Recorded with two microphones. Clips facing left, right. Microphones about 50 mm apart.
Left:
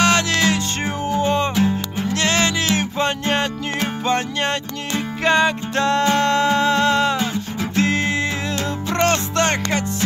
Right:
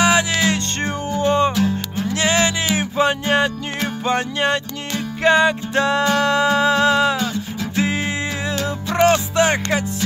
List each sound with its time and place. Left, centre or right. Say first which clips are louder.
0.0 s music: even; centre
1.5 s music: left 1 dB; centre
2.1 s music: right 1 dB; centre